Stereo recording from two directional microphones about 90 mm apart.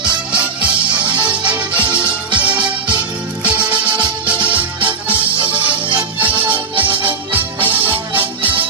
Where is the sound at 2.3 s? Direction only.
60° right (ahead or behind).